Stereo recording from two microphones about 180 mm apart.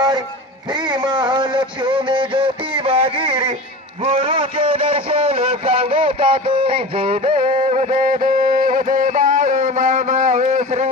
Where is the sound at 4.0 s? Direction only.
30° right (ahead or behind).